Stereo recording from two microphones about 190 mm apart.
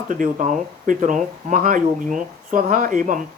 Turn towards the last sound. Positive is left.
turn(degrees=-45)  # may be behind; listen again after turning